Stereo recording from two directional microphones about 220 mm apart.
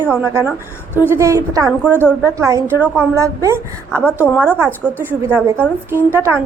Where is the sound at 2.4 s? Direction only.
15° right (ahead or behind).